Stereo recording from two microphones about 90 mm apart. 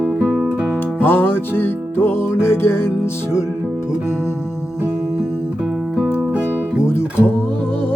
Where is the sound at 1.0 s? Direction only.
25° left (ahead or behind).